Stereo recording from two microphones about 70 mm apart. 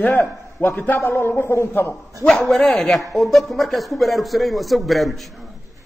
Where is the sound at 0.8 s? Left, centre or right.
Left.